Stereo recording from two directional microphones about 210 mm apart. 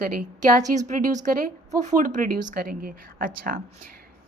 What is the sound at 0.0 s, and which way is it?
A woman's voice, 40° right (ahead or behind).